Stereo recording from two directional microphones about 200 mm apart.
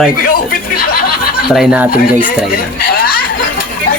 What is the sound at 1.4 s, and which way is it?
Speech, centre (ahead or behind).